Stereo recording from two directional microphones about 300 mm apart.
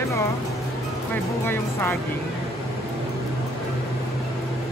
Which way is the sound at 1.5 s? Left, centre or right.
Centre.